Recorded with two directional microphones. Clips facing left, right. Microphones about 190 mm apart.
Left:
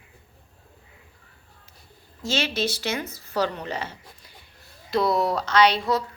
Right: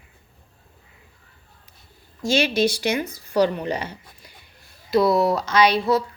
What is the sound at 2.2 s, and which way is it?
Speech, 15° right (ahead or behind).